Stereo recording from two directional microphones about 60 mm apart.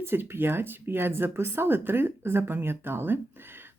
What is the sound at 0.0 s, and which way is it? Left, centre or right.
Speech, right.